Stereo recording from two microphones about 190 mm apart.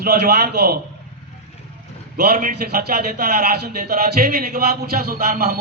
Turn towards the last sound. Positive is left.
turn(degrees=-55)  # may be behind; listen again after turning